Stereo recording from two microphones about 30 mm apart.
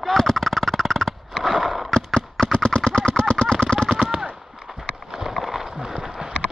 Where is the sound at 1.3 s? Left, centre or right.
Centre.